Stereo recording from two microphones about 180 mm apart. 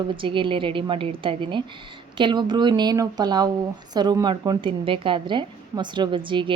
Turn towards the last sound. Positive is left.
turn(degrees=-25)  # may be behind; listen again after turning